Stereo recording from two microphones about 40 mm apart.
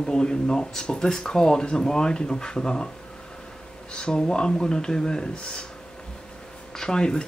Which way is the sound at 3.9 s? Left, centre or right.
Left.